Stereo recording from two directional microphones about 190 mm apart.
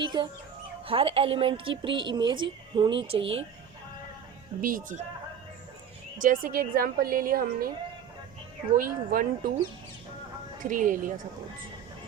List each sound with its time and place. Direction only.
0.0 s a woman's voice: 25° right (ahead or behind)
4.6 s a woman's voice: 45° right (ahead or behind)
6.2 s a woman's voice: 50° right (ahead or behind)
8.7 s a woman's voice: 50° right (ahead or behind)
10.6 s a woman's voice: 45° right (ahead or behind)